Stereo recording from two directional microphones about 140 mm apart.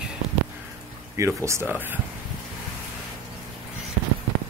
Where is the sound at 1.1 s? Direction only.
20° right (ahead or behind).